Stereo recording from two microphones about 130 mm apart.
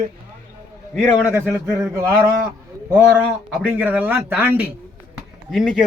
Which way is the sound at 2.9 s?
10° right (ahead or behind).